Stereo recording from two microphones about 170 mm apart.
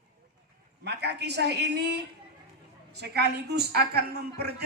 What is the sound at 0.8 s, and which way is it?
A woman's voice, 80° right.